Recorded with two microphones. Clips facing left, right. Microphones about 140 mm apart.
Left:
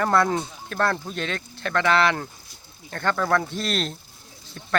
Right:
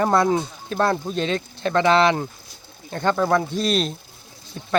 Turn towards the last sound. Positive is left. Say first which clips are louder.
# right 4 dB
turn(degrees=-15)  # may be behind; listen again after turning